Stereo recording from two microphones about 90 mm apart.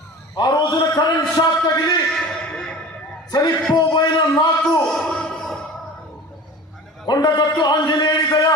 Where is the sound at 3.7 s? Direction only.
50° left (ahead or behind).